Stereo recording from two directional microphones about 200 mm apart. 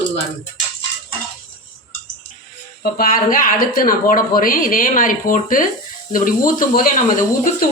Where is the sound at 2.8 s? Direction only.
45° left (ahead or behind).